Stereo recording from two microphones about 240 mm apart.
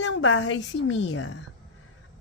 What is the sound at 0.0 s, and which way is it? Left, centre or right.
Speech, left.